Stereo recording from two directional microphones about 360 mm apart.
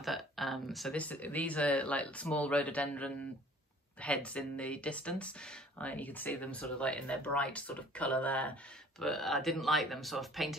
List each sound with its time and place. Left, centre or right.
0.0 s speech: centre